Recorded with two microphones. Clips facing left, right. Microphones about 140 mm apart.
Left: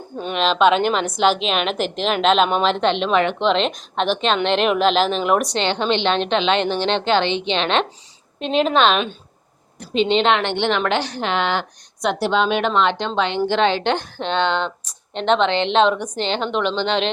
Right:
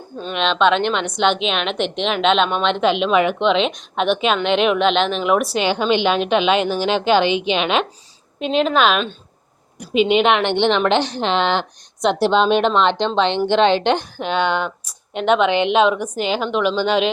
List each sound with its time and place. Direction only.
0.3 s a woman's voice: 5° left (ahead or behind)